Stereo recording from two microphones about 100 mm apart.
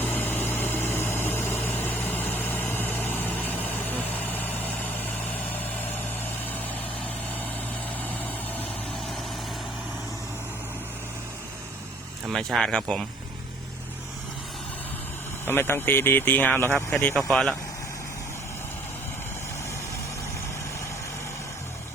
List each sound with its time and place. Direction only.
0.0 s a sound: 20° left (ahead or behind)
3.3 s vehicle: 15° left (ahead or behind)
8.0 s vehicle: 15° left (ahead or behind)
12.3 s speech: 5° left (ahead or behind)
15.4 s speech: 20° left (ahead or behind)
17.3 s speech: 5° left (ahead or behind)